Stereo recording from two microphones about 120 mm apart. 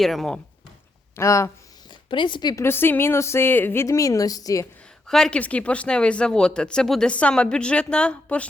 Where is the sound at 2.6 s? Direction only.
20° left (ahead or behind).